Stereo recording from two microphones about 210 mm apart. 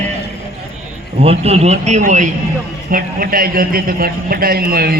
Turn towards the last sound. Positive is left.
turn(degrees=-45)  # may be behind; listen again after turning